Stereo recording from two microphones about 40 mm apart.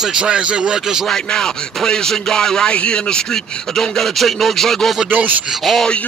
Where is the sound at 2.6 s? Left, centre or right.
Left.